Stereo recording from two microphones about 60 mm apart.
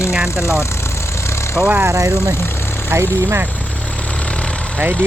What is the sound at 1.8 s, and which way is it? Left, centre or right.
Speech, right.